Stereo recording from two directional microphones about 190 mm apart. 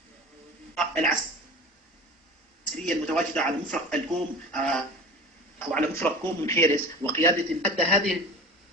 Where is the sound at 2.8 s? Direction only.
5° left (ahead or behind).